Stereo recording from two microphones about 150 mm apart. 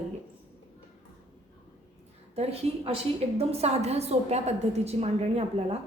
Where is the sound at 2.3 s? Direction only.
45° right (ahead or behind).